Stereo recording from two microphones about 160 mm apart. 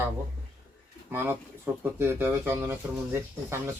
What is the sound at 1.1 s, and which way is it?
Speech, 15° right (ahead or behind).